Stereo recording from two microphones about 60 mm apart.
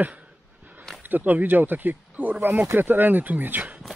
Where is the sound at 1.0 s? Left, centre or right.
Right.